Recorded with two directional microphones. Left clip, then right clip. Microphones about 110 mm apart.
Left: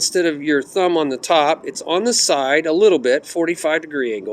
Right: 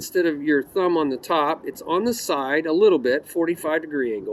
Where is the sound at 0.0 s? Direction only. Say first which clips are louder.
Left 4 dB; 40° right (ahead or behind).